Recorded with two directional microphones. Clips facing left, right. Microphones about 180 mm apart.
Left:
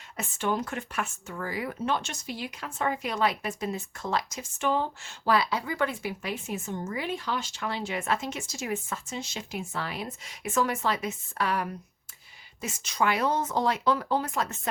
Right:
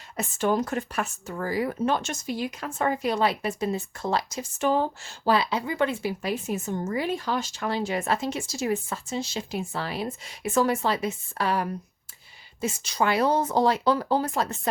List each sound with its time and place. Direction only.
0.2 s speech: 40° right (ahead or behind)